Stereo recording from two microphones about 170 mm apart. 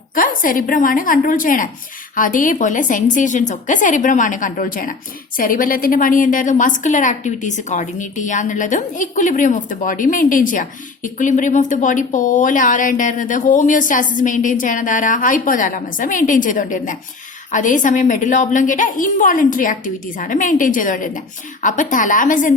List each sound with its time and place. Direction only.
0.1 s a woman's voice: 55° left (ahead or behind)